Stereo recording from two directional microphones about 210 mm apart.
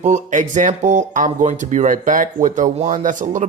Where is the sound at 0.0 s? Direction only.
35° right (ahead or behind).